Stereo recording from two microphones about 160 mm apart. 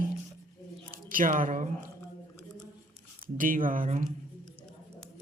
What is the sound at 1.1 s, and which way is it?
Speech, 60° right (ahead or behind).